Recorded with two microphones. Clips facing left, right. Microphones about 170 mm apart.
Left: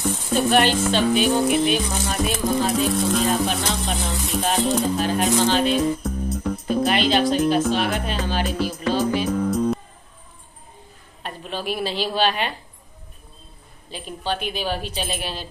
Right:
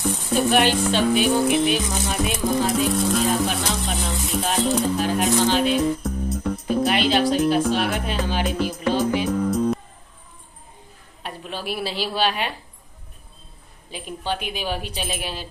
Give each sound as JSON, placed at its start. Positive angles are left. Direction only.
{"t": 0.0, "sound": "a woman's voice", "side_deg": -10}
{"t": 1.9, "sound": "music", "side_deg": -5}
{"t": 4.9, "sound": "speech", "side_deg": 0}
{"t": 5.6, "sound": "music", "side_deg": -5}
{"t": 8.2, "sound": "a woman's voice", "side_deg": -15}
{"t": 8.9, "sound": "music", "side_deg": -15}
{"t": 9.2, "sound": "music", "side_deg": 0}
{"t": 11.2, "sound": "a woman's voice", "side_deg": -10}
{"t": 13.8, "sound": "a woman's voice", "side_deg": -10}